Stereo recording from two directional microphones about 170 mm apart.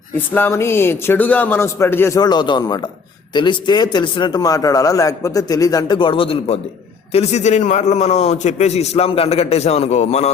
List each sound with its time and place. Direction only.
0.3 s a man's voice: 15° left (ahead or behind); by 10.3 s 40° left (ahead or behind)